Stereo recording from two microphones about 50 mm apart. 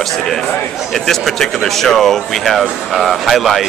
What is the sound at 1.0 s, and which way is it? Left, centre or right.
A man's voice, centre.